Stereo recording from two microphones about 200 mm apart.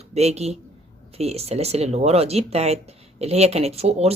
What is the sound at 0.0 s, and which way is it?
Speech, 35° right (ahead or behind).